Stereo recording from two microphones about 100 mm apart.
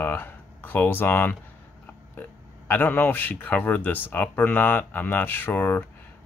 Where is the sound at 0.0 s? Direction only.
20° left (ahead or behind).